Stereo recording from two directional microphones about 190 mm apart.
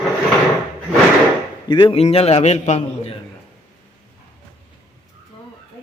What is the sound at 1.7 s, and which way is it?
A man's voice, 25° left (ahead or behind).